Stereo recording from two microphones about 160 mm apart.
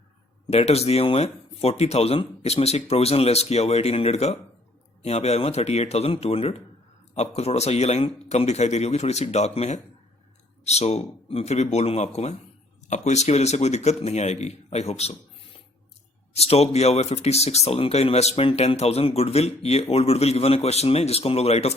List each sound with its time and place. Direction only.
0.5 s speech: 40° left (ahead or behind)
16.5 s speech: 40° left (ahead or behind)